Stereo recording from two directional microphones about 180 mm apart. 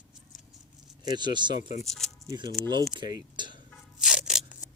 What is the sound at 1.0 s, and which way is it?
Speech, 25° right (ahead or behind).